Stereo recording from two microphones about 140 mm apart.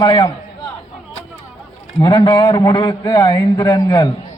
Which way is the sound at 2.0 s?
35° left (ahead or behind).